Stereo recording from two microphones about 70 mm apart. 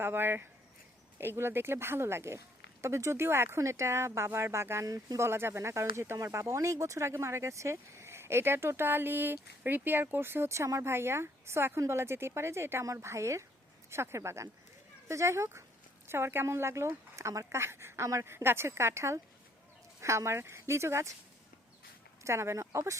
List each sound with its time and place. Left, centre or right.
0.0 s speech: right
4.9 s speech: right
5.2 s a woman's voice: right
22.2 s speech: right